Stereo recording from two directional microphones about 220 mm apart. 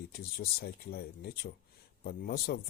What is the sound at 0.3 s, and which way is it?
Speech, 45° left (ahead or behind).